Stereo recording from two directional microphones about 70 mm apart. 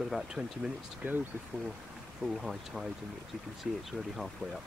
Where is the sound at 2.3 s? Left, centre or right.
Centre.